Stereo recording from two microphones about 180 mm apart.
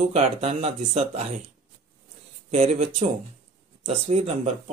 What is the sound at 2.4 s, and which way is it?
Speech, 40° right (ahead or behind).